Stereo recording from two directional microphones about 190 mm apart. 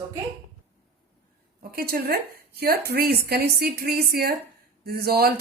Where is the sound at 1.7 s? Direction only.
55° right (ahead or behind).